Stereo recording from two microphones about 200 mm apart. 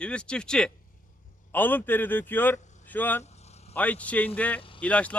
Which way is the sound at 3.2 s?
35° left (ahead or behind).